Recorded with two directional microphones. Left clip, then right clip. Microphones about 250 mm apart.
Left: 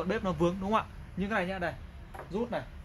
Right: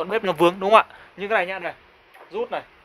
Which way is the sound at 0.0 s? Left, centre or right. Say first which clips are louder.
Right 11 dB; right.